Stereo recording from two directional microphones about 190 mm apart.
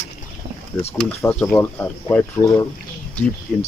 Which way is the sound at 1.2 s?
10° left (ahead or behind).